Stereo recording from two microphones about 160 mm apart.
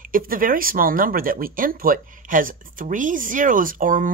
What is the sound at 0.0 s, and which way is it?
Speech, 60° right (ahead or behind).